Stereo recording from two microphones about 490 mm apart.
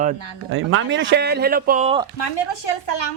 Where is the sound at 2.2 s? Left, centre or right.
Left.